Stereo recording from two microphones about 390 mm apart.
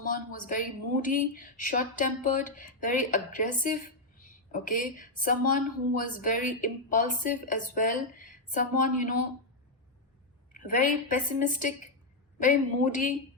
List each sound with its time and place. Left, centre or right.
0.0 s speech: left
10.5 s speech: centre